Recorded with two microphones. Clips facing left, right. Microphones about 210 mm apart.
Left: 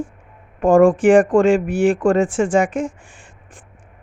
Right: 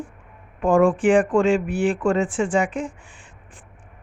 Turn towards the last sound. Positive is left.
turn(degrees=45)  # may be behind; listen again after turning